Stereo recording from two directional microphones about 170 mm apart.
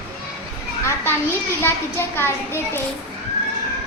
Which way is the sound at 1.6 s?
15° left (ahead or behind).